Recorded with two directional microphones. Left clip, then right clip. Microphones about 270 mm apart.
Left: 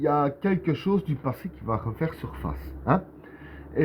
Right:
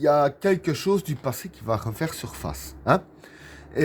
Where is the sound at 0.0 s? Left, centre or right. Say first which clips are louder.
Right 4 dB; right.